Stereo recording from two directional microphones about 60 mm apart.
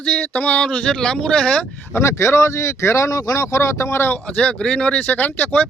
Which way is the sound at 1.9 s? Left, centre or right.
Left.